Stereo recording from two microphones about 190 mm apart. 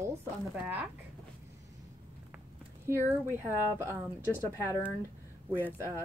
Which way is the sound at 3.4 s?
10° right (ahead or behind).